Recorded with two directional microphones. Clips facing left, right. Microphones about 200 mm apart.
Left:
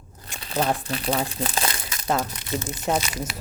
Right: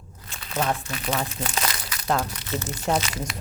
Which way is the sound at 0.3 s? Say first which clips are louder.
Left 2 dB; 30° left (ahead or behind).